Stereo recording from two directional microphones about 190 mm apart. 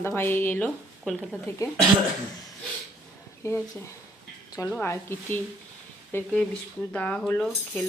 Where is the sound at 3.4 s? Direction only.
15° left (ahead or behind).